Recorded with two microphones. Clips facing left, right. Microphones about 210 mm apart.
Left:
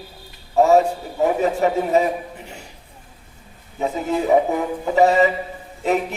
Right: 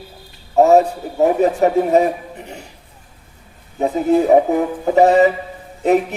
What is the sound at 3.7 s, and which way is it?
Speech, 45° right (ahead or behind).